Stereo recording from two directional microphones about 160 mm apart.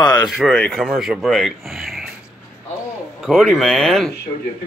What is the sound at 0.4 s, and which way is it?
Speech, 5° left (ahead or behind).